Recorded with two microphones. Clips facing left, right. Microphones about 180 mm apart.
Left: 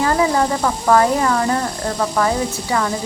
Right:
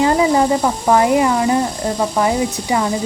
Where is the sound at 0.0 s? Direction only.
20° right (ahead or behind).